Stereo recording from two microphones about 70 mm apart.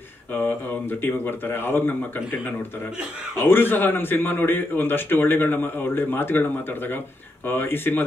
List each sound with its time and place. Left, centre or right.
0.3 s a sound: left
1.0 s a man's voice: left
3.3 s a man's voice: left